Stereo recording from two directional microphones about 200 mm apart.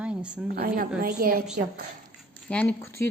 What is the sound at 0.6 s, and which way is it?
Speech, 45° right (ahead or behind).